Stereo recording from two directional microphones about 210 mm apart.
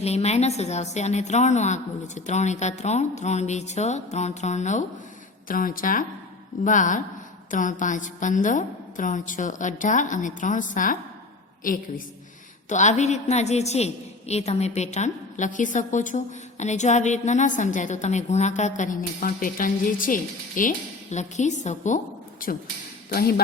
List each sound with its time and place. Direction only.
0.0 s a woman's voice: 30° left (ahead or behind)